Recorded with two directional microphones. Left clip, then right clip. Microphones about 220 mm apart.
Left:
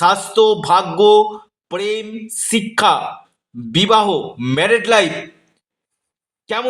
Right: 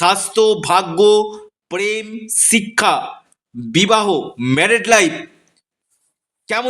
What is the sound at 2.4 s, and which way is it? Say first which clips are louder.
A man's voice: right 1 dB; 30° right (ahead or behind).